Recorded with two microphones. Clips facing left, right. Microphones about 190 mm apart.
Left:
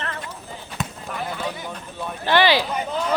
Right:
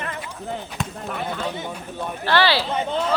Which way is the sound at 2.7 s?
25° right (ahead or behind).